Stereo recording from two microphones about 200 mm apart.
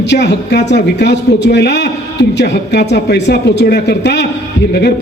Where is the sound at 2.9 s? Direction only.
60° left (ahead or behind).